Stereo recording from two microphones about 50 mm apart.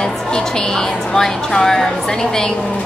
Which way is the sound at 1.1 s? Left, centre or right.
Centre.